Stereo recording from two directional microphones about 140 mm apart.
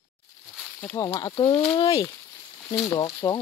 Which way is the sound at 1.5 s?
35° left (ahead or behind).